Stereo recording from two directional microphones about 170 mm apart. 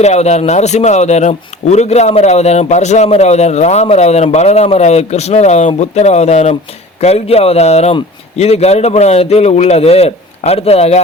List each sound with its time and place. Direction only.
0.0 s speech: 40° left (ahead or behind)